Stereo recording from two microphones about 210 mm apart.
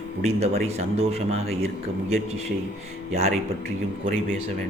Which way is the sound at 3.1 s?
30° right (ahead or behind).